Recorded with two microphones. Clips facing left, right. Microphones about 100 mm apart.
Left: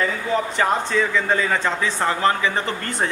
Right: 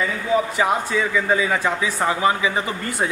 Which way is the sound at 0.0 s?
10° right (ahead or behind).